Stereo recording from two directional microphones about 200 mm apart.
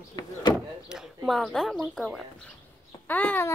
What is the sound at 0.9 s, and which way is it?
Speech, centre (ahead or behind).